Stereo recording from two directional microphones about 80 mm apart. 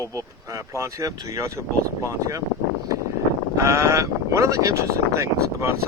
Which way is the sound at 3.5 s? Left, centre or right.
Right.